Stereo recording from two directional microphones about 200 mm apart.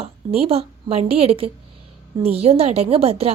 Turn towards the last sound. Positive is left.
turn(degrees=-30)  # may be behind; listen again after turning